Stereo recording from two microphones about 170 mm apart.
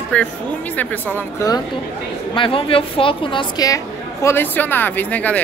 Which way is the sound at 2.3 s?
30° left (ahead or behind).